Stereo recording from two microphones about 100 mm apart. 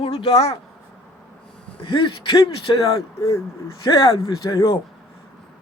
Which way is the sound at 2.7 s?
45° left (ahead or behind).